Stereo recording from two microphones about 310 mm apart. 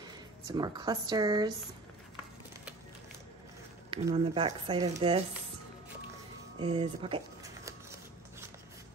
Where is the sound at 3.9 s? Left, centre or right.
Centre.